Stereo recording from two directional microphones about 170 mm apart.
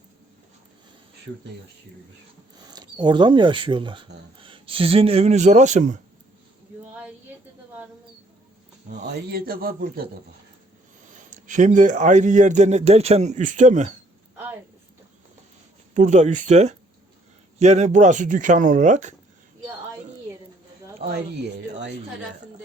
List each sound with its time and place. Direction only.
2.6 s a man's voice: 25° right (ahead or behind); by 6.0 s 45° right (ahead or behind)
9.1 s a man's voice: 60° right (ahead or behind)
11.3 s speech: 45° right (ahead or behind)
16.0 s speech: 45° right (ahead or behind)
21.0 s a man's voice: 35° right (ahead or behind)